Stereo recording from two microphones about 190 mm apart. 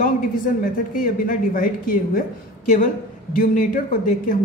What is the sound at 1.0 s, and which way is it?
Speech, 45° left (ahead or behind).